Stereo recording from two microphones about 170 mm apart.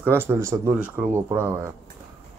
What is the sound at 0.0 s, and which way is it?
Speech, 15° right (ahead or behind).